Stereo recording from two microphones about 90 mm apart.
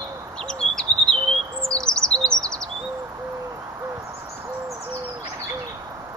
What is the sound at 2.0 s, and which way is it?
Chirp, 10° left (ahead or behind).